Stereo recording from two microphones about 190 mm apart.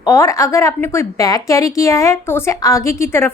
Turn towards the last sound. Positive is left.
turn(degrees=15)  # may be behind; listen again after turning